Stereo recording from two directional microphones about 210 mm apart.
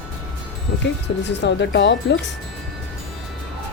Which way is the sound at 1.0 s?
55° left (ahead or behind).